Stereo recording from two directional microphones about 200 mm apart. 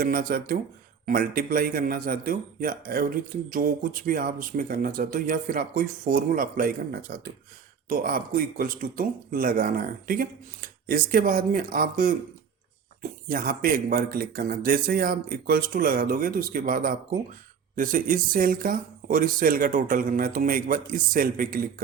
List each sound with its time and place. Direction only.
0.0 s speech: 45° right (ahead or behind)